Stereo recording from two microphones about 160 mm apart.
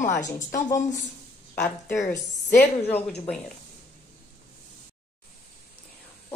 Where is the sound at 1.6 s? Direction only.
20° left (ahead or behind).